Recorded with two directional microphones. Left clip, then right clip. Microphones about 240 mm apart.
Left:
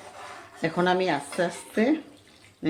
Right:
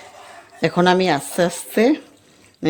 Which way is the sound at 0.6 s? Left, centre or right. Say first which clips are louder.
Right 8 dB; right.